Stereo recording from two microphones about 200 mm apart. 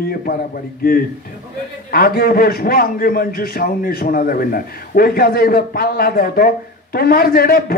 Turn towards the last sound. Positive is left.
turn(degrees=50)  # may be behind; listen again after turning